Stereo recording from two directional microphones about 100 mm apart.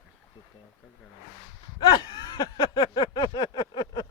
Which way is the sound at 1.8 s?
50° left (ahead or behind).